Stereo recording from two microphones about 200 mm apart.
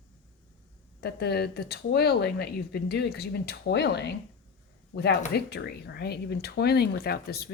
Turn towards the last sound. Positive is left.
turn(degrees=50)  # may be behind; listen again after turning